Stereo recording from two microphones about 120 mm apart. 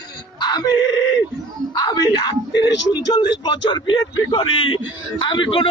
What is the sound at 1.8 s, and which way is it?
A man's voice, 35° left (ahead or behind).